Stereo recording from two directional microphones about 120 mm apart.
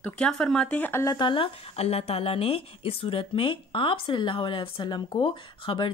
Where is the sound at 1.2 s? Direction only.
45° left (ahead or behind).